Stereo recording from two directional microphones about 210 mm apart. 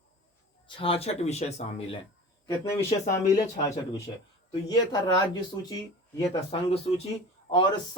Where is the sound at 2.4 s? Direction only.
15° left (ahead or behind).